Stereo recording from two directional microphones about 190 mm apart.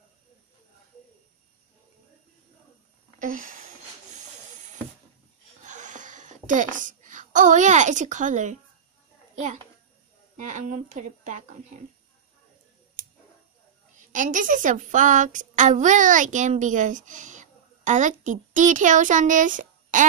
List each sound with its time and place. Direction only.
3.2 s a sound: 45° right (ahead or behind)
9.3 s a child's voice: 40° right (ahead or behind)
14.1 s child singing: 45° right (ahead or behind)